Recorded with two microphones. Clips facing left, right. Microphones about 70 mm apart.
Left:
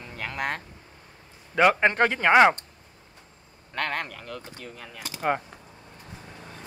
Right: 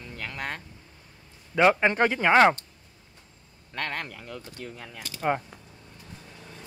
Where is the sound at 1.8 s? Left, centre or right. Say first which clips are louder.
Left 1 dB; left.